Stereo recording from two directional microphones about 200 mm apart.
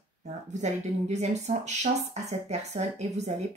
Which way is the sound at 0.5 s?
35° right (ahead or behind).